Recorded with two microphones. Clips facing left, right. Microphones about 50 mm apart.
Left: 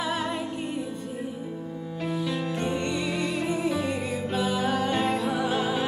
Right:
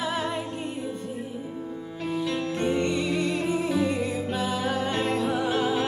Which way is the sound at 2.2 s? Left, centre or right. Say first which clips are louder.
Right 4 dB; centre.